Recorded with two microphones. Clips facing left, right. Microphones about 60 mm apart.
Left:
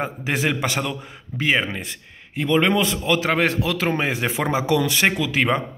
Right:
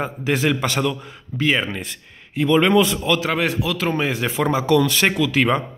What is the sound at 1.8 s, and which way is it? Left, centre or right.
A man's voice, centre.